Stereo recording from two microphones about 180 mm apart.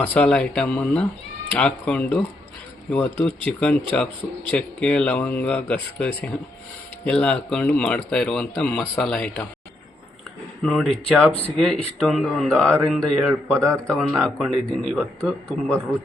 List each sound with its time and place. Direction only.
0.0 s speech: 10° left (ahead or behind)
10.6 s speech: 5° left (ahead or behind)